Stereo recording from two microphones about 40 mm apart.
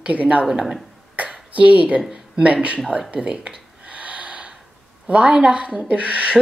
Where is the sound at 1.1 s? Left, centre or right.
Right.